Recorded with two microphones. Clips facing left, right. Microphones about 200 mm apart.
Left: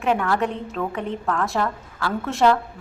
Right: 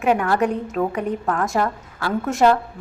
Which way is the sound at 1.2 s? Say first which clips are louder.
Even; 15° right (ahead or behind).